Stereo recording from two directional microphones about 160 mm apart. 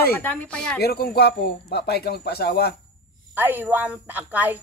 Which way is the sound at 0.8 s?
80° left.